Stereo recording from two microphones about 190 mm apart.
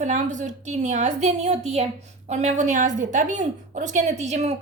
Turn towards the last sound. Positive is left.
turn(degrees=-35)  # may be behind; listen again after turning